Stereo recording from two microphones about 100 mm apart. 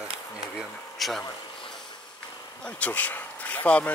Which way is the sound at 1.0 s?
Centre (ahead or behind).